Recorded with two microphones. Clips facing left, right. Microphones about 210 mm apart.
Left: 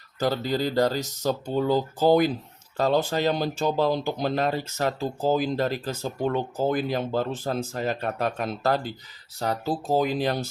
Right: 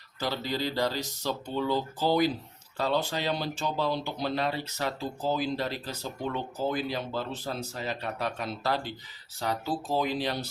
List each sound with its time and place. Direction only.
0.2 s speech: 45° left (ahead or behind)